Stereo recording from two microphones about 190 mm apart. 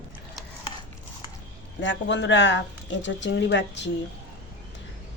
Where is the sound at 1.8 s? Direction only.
70° left (ahead or behind).